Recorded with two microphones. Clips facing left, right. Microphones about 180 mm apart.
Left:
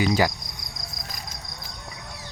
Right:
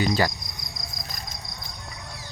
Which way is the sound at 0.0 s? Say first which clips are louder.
Left 2 dB; 10° left (ahead or behind).